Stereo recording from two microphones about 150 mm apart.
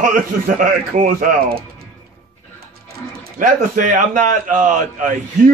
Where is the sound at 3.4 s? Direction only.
60° right (ahead or behind).